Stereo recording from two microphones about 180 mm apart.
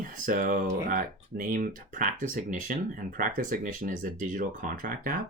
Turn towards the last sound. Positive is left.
turn(degrees=-50)  # may be behind; listen again after turning